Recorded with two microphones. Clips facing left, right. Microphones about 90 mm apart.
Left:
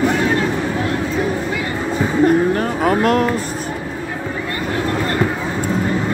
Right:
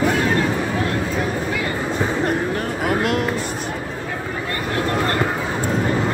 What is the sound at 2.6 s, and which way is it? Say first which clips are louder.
Speech: left 4 dB; 40° left (ahead or behind).